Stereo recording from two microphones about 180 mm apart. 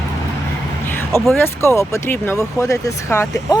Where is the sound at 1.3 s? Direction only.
10° left (ahead or behind).